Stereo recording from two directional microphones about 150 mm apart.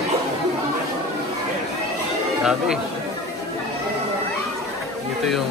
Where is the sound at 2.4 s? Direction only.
5° right (ahead or behind).